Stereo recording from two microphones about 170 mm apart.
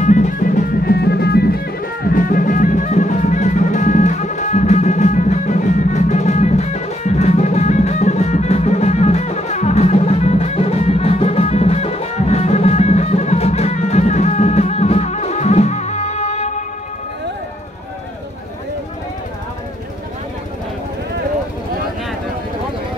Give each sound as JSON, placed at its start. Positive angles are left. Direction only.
{"t": 0.0, "sound": "music", "side_deg": 45}
{"t": 2.0, "sound": "music", "side_deg": 55}